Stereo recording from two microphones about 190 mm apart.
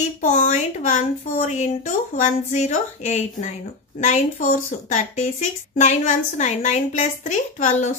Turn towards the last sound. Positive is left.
turn(degrees=40)  # may be behind; listen again after turning